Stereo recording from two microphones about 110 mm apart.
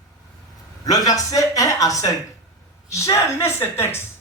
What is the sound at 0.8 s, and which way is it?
A man's voice, 30° left (ahead or behind).